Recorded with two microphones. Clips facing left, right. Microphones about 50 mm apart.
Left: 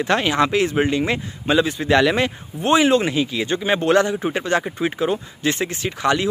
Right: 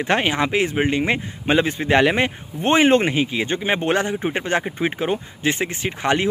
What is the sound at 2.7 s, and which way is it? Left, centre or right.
A man's voice, right.